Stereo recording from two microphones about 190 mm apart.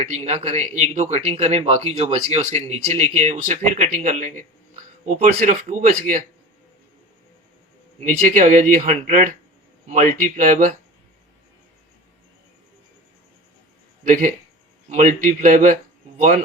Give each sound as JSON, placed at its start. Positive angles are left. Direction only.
{"t": 0.1, "sound": "speech", "side_deg": -35}
{"t": 8.2, "sound": "speech", "side_deg": -45}
{"t": 14.1, "sound": "speech", "side_deg": -45}